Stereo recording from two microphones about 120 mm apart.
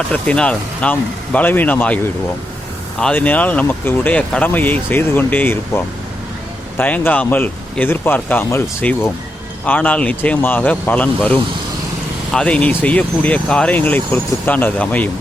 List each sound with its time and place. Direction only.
0.1 s speech: 10° left (ahead or behind)